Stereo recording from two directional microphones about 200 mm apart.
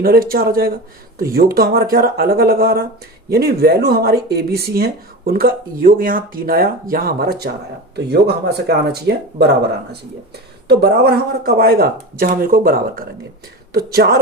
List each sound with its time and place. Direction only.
0.0 s speech: 45° right (ahead or behind)
10.7 s speech: 55° right (ahead or behind)